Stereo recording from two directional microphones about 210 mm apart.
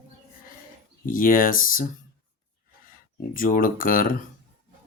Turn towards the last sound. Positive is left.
turn(degrees=40)  # may be behind; listen again after turning